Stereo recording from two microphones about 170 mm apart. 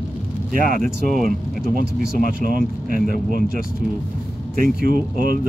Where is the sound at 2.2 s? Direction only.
55° right (ahead or behind).